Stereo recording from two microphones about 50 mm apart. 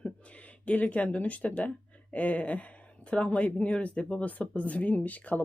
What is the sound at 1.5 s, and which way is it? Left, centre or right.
Speech, left.